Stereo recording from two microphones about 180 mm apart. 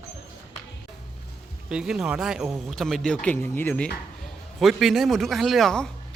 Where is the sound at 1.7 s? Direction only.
5° right (ahead or behind).